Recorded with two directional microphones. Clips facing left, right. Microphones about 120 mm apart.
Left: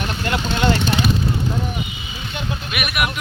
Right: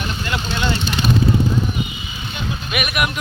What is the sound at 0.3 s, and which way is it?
Speech, 55° left (ahead or behind).